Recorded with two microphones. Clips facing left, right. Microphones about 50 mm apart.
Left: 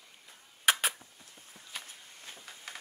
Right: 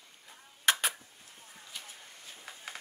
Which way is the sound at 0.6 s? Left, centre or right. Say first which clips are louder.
Left 1 dB; centre.